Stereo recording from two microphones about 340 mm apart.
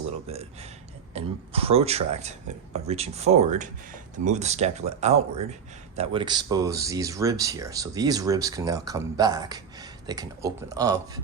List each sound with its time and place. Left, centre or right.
0.3 s speech: centre